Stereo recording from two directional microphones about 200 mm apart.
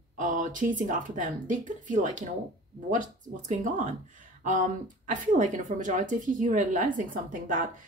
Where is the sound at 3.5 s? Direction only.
40° right (ahead or behind).